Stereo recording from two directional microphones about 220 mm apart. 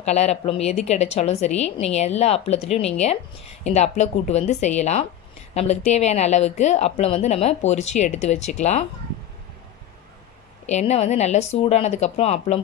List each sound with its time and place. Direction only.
0.0 s a woman's voice: 30° left (ahead or behind)
10.7 s a woman's voice: 30° left (ahead or behind)